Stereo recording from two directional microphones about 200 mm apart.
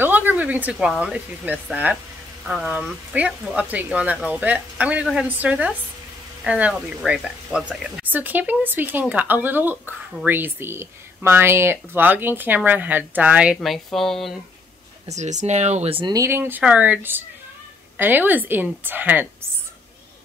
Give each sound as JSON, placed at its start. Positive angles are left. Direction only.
{"t": 0.0, "sound": "speech", "side_deg": -10}
{"t": 15.1, "sound": "speech", "side_deg": -35}